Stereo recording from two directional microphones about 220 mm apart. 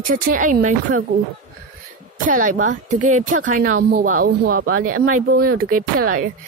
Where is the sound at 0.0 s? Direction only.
35° right (ahead or behind).